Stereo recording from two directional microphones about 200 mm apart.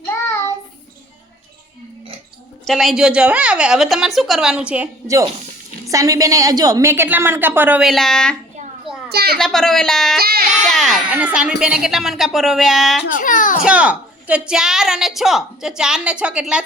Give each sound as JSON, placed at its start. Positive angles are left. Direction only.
{"t": 2.6, "sound": "a woman's voice", "side_deg": 0}
{"t": 9.0, "sound": "a child's voice", "side_deg": -50}
{"t": 9.4, "sound": "a woman's voice", "side_deg": 0}
{"t": 10.2, "sound": "child singing", "side_deg": -50}
{"t": 10.7, "sound": "a sound", "side_deg": 0}
{"t": 11.6, "sound": "a woman's voice", "side_deg": -5}
{"t": 13.1, "sound": "a child's voice", "side_deg": 40}
{"t": 13.6, "sound": "a woman's voice", "side_deg": -5}